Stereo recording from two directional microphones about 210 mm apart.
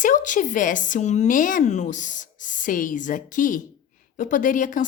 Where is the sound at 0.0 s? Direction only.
35° left (ahead or behind).